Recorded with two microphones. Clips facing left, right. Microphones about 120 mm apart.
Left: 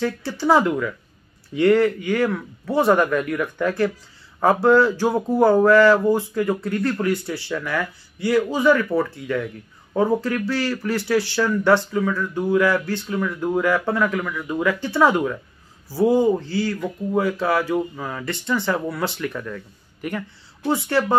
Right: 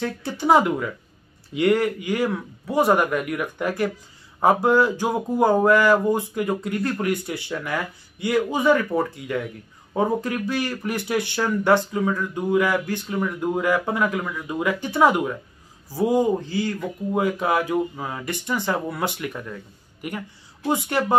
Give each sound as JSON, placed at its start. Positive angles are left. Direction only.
{"t": 0.0, "sound": "a woman's voice", "side_deg": -20}